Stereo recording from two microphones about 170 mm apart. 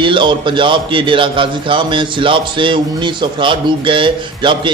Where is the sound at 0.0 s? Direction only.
30° right (ahead or behind).